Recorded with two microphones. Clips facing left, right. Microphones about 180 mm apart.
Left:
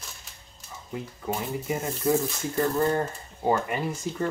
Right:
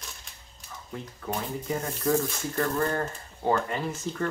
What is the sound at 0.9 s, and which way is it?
Speech, 10° left (ahead or behind).